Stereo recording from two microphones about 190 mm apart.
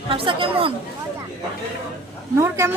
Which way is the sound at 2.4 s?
15° right (ahead or behind).